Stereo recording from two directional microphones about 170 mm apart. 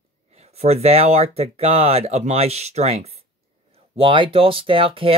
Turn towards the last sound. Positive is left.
turn(degrees=-30)  # may be behind; listen again after turning